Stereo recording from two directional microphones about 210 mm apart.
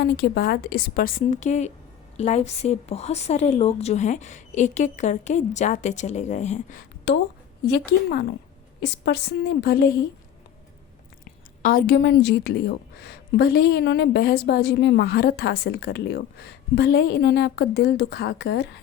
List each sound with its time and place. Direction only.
0.0 s a woman's voice: 50° left (ahead or behind); by 6.8 s 35° left (ahead or behind)
7.1 s a woman's voice: 55° left (ahead or behind)
11.3 s a woman's voice: 45° left (ahead or behind)